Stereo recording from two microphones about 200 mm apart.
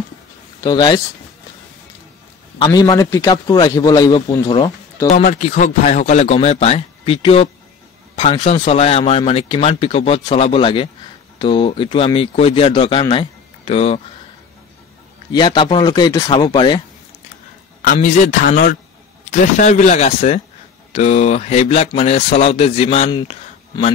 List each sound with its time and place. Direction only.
0.7 s speech: 20° left (ahead or behind)
2.6 s speech: 20° left (ahead or behind)
5.1 s a man's voice: 40° left (ahead or behind)
15.3 s speech: 25° left (ahead or behind)
17.9 s a man's voice: 40° left (ahead or behind)